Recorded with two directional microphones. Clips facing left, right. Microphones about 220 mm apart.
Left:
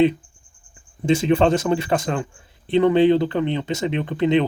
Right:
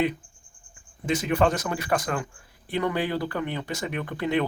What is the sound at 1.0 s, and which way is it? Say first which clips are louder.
Speech: left 6 dB; 30° left (ahead or behind).